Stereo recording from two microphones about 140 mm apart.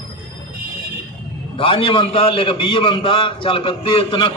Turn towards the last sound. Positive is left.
turn(degrees=40)  # may be behind; listen again after turning